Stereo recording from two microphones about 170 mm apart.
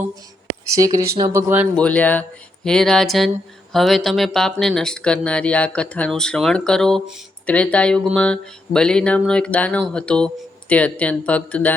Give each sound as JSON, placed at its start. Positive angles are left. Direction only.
{"t": 0.7, "sound": "speech", "side_deg": -20}
{"t": 1.7, "sound": "speech", "side_deg": 5}